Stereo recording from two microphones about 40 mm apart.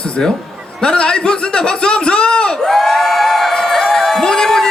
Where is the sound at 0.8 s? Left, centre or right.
Left.